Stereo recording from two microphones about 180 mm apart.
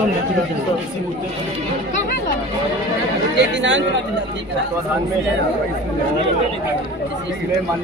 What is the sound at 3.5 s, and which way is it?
Speech, 90° right.